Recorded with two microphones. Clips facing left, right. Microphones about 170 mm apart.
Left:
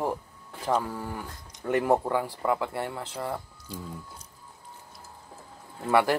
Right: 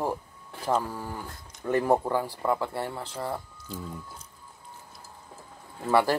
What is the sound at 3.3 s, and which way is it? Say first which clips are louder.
Speech: even; 10° left (ahead or behind).